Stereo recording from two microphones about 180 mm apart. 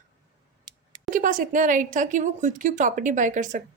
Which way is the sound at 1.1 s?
50° right (ahead or behind).